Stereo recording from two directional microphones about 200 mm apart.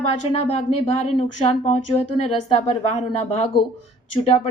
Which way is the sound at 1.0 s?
35° left (ahead or behind).